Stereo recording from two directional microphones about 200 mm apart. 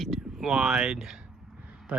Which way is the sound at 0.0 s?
Centre (ahead or behind).